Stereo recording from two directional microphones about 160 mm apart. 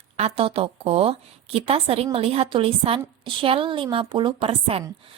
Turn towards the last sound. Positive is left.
turn(degrees=-35)  # may be behind; listen again after turning